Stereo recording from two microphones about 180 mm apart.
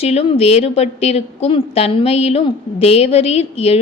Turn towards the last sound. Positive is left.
turn(degrees=35)  # may be behind; listen again after turning